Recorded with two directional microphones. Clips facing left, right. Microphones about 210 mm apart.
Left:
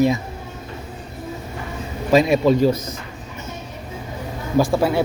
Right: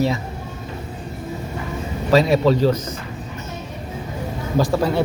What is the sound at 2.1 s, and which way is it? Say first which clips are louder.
Speech: left 1 dB; 15° left (ahead or behind).